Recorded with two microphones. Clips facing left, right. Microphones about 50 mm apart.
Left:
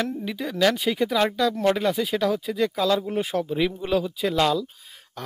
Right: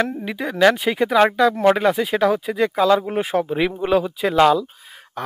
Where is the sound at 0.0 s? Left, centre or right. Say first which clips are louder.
Right 5 dB; right.